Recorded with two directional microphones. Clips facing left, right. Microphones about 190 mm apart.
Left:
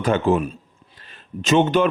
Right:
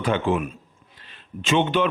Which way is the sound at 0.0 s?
40° left (ahead or behind).